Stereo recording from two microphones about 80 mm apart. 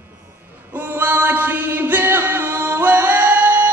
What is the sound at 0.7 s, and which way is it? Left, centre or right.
Music, right.